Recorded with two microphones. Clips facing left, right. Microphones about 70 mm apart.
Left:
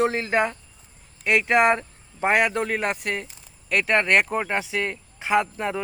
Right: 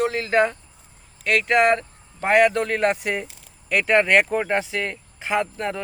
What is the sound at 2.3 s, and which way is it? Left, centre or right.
Speech, centre.